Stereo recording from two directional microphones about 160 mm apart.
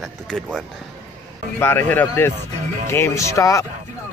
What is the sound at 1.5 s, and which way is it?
Speech, 15° left (ahead or behind).